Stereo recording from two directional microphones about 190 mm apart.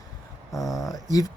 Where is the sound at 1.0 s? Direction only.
20° left (ahead or behind).